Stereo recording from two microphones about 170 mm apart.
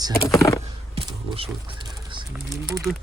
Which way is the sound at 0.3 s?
20° left (ahead or behind).